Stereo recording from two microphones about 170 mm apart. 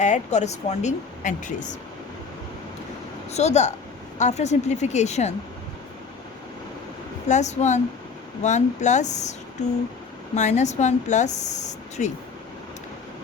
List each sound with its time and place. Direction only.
0.0 s speech: 45° left (ahead or behind)
3.3 s speech: 40° left (ahead or behind)
7.3 s speech: 45° left (ahead or behind)
10.3 s speech: 45° left (ahead or behind)